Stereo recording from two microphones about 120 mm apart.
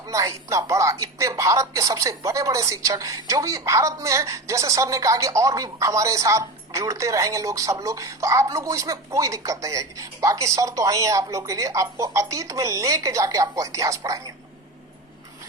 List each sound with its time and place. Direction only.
0.1 s speech: 25° right (ahead or behind)